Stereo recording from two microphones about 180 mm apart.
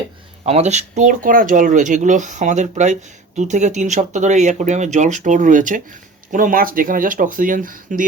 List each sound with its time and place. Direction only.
0.4 s speech: 35° right (ahead or behind)